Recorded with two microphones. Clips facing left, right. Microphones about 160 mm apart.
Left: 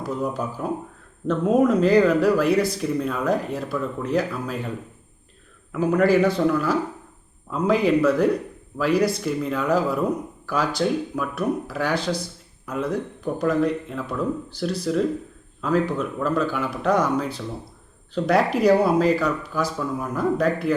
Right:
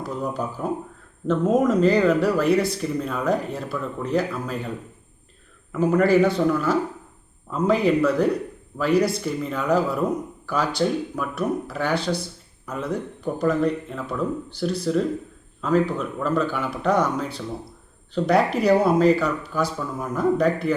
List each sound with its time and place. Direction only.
0.2 s speech: 5° left (ahead or behind)
5.7 s speech: centre (ahead or behind)